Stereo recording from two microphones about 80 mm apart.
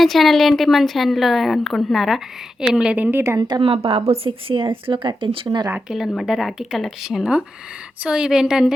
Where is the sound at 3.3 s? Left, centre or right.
Right.